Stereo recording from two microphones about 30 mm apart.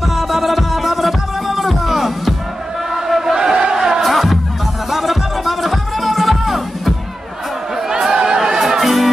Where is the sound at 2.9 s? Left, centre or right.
Centre.